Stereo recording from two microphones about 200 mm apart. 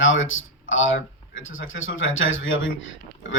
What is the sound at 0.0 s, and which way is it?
A woman's voice, 75° left (ahead or behind).